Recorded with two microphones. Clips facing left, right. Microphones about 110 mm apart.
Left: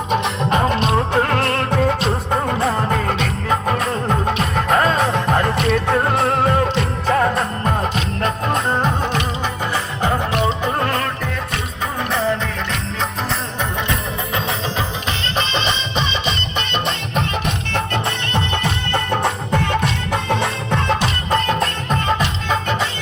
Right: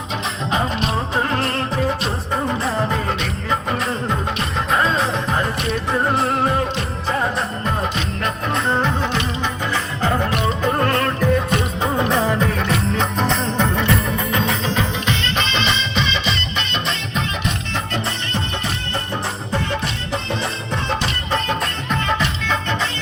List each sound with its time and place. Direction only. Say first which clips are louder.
0.1 s music: left 5 dB; 55° left (ahead or behind)
2.6 s music: left 2 dB; 50° left (ahead or behind)
4.5 s music: left 2 dB; 55° left (ahead or behind)
11.9 s music: right 1 dB; 15° right (ahead or behind)
15.4 s music: even; 45° left (ahead or behind)
17.9 s music: left 2 dB; 65° left (ahead or behind); by 21.7 s 45° left (ahead or behind)